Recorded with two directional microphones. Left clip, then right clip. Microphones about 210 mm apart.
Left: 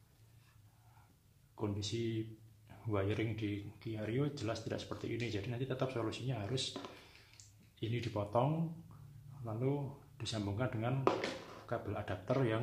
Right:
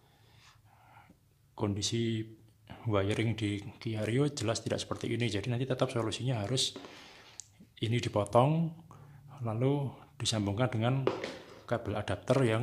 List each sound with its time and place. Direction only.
1.5 s speech: 50° right (ahead or behind)
7.3 s a sound: 50° right (ahead or behind)
9.4 s speech: 50° right (ahead or behind)